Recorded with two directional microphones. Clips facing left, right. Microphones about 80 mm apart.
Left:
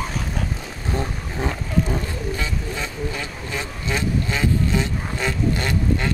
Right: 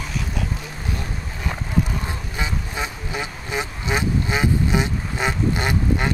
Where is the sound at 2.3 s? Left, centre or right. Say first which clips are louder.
Even; centre.